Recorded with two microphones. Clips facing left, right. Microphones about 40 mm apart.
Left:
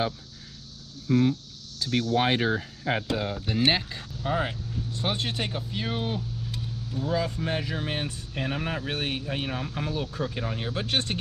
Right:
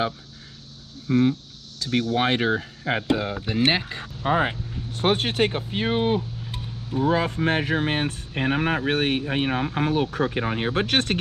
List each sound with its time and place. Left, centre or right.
1.0 s speech: right
4.0 s speech: right
4.9 s speech: right